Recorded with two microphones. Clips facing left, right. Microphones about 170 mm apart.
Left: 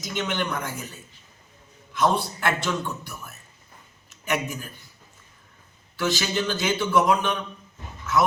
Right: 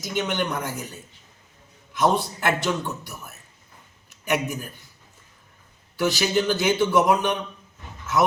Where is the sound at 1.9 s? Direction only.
20° right (ahead or behind).